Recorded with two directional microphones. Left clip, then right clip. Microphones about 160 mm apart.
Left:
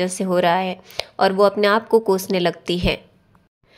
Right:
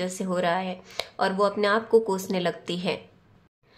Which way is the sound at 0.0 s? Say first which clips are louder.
Left 8 dB; 40° left (ahead or behind).